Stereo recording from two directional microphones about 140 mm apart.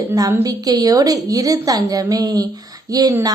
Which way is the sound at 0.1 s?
25° right (ahead or behind).